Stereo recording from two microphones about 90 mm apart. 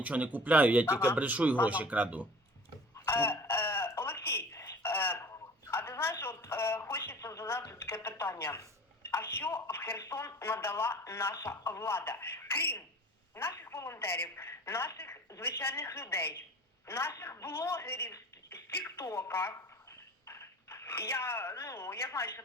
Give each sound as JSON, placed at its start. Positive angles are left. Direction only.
{"t": 0.0, "sound": "speech", "side_deg": -15}
{"t": 0.9, "sound": "speech", "side_deg": 30}
{"t": 1.1, "sound": "speech", "side_deg": -15}
{"t": 3.1, "sound": "a sound", "side_deg": 25}
{"t": 7.1, "sound": "a woman's voice", "side_deg": 35}